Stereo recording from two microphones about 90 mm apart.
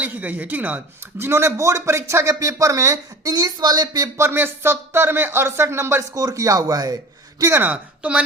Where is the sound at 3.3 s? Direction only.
45° right (ahead or behind).